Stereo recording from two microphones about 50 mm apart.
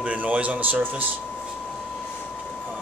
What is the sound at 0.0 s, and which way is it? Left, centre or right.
Speech, right.